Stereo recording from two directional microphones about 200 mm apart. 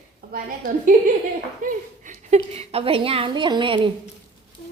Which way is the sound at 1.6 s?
35° right (ahead or behind).